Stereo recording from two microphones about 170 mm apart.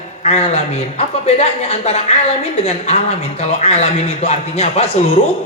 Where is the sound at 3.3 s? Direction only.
40° left (ahead or behind).